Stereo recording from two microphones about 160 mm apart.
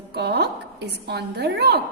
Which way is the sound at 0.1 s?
90° right.